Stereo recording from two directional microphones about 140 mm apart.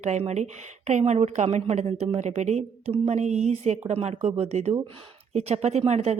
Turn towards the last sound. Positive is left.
turn(degrees=-50)  # may be behind; listen again after turning